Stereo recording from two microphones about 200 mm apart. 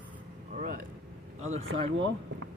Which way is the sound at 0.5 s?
40° right (ahead or behind).